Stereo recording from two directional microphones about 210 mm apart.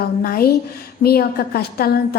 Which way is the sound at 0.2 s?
45° left (ahead or behind).